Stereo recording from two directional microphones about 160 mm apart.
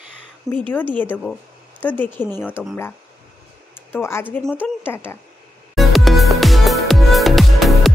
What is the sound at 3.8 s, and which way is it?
Speech, 15° left (ahead or behind).